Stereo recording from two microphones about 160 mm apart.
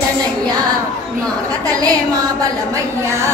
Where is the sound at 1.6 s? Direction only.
20° right (ahead or behind).